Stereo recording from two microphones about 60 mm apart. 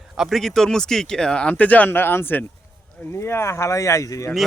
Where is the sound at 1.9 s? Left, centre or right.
Left.